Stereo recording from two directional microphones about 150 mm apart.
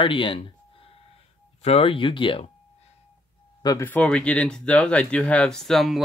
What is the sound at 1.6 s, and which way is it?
Speech, 40° left (ahead or behind).